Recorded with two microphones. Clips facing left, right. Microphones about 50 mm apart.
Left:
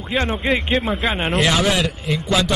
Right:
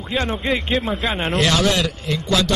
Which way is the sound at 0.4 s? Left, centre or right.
Centre.